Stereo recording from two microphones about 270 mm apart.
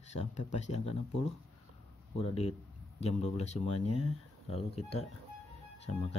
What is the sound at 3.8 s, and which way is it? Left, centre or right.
Speech, left.